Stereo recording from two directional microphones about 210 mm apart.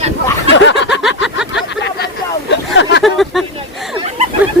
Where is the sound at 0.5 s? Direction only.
60° left (ahead or behind).